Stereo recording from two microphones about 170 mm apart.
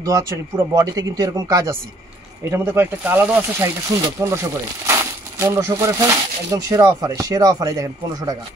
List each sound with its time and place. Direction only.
0.0 s speech: 20° right (ahead or behind)
5.4 s speech: 15° right (ahead or behind)